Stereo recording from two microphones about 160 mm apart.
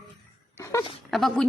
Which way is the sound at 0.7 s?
20° left (ahead or behind).